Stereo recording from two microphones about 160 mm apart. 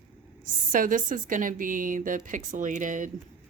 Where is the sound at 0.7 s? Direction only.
55° right (ahead or behind).